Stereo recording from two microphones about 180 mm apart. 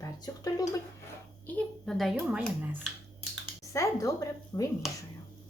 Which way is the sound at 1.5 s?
Centre (ahead or behind).